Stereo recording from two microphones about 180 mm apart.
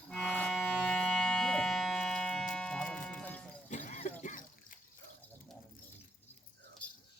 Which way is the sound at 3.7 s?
45° left (ahead or behind).